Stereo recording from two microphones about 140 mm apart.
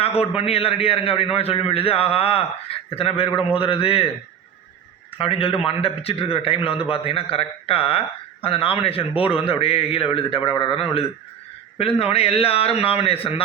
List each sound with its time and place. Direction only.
0.2 s a man's voice: 45° left (ahead or behind)
5.1 s a man's voice: 40° left (ahead or behind)